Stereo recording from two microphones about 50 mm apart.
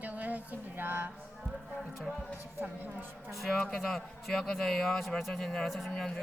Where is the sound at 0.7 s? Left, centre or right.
Right.